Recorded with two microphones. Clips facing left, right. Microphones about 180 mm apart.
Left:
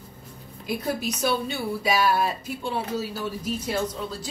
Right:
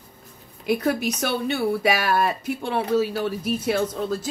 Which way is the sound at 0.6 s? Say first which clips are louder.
Right 6 dB; 65° right (ahead or behind).